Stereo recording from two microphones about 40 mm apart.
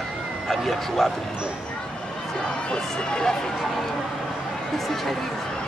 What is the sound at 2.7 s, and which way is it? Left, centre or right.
Speech, centre.